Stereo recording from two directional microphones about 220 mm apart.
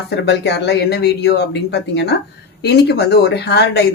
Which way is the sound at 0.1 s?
50° left (ahead or behind).